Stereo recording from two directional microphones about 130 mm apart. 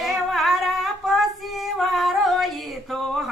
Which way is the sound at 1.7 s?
Centre (ahead or behind).